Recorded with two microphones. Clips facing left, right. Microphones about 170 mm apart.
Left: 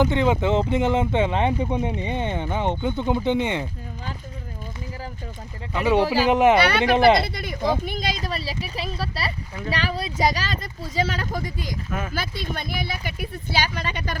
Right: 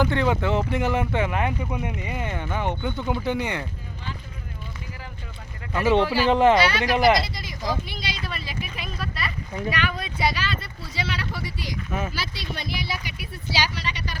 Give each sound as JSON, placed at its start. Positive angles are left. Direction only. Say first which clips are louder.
{"t": 0.0, "sound": "speech", "louder": "left 2 dB", "side_deg": 20}
{"t": 6.2, "sound": "speech", "louder": "even", "side_deg": 15}
{"t": 6.6, "sound": "speech", "louder": "left 3 dB", "side_deg": 60}
{"t": 7.9, "sound": "speech", "louder": "left 6 dB", "side_deg": 45}
{"t": 11.9, "sound": "speech", "louder": "right 2 dB", "side_deg": -5}
{"t": 12.1, "sound": "speech", "louder": "left 4 dB", "side_deg": 50}